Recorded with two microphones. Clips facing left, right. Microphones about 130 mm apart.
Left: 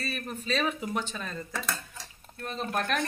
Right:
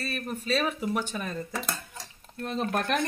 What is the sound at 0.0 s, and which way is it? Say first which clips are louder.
Speech: right 2 dB; centre (ahead or behind).